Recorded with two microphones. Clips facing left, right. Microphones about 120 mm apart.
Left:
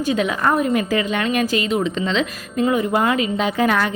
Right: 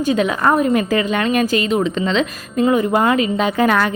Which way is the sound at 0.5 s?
50° right (ahead or behind).